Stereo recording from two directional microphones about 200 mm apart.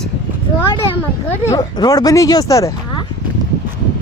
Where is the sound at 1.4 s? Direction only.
15° left (ahead or behind).